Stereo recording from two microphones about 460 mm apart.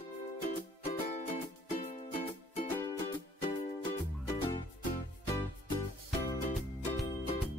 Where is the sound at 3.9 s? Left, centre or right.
Centre.